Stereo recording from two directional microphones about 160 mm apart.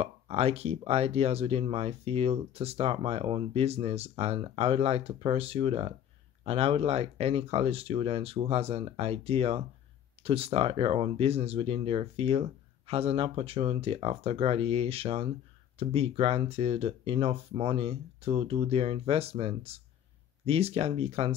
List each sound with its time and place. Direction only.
0.0 s speech: 40° right (ahead or behind)